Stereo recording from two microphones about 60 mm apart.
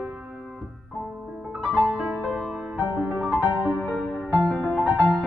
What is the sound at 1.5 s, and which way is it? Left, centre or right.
Music, right.